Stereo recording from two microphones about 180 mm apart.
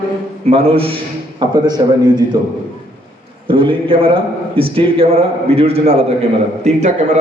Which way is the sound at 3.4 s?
30° right (ahead or behind).